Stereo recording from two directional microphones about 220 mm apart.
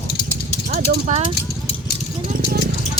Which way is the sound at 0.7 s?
35° right (ahead or behind).